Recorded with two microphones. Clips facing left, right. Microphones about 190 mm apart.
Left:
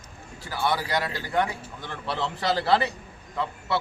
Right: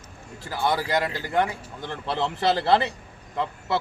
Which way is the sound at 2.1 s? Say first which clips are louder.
Right 3 dB; 25° right (ahead or behind).